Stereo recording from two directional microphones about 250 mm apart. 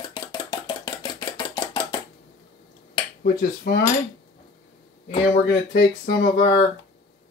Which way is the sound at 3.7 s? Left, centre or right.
Left.